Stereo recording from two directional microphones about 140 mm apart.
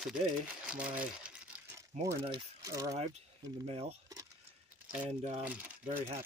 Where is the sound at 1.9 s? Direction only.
55° right (ahead or behind).